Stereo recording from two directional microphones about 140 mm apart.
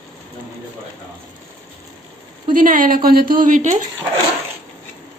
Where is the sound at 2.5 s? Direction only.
75° right (ahead or behind).